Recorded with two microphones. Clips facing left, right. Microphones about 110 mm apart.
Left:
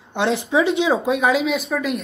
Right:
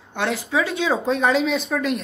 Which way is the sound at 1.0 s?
5° left (ahead or behind).